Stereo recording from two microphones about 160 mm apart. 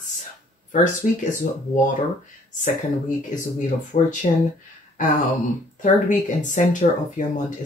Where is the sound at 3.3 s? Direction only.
50° left (ahead or behind).